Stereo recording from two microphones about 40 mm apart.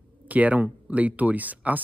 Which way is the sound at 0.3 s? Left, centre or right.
Right.